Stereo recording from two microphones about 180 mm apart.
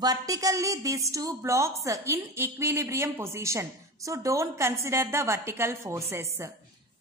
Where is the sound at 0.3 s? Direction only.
20° right (ahead or behind).